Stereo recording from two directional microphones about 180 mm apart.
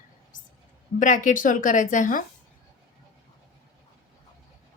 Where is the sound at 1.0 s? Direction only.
45° left (ahead or behind).